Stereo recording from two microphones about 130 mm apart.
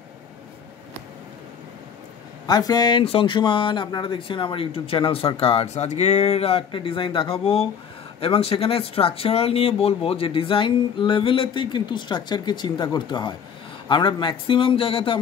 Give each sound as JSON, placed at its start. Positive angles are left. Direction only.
{"t": 2.4, "sound": "a man's voice", "side_deg": 30}